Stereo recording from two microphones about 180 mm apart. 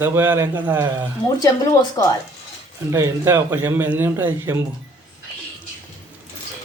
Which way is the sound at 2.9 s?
15° right (ahead or behind).